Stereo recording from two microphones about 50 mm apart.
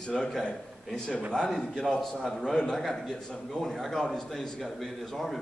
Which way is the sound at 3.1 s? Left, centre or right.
Centre.